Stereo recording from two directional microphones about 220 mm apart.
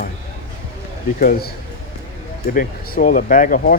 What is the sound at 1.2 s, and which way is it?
Speech, 40° left (ahead or behind).